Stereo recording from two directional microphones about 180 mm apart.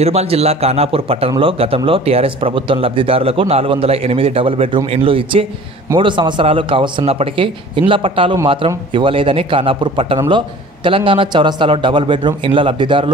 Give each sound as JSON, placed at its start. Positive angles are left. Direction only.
{"t": 0.0, "sound": "a man's voice", "side_deg": -35}